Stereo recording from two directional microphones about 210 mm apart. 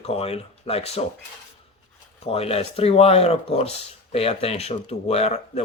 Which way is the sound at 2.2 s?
30° left (ahead or behind).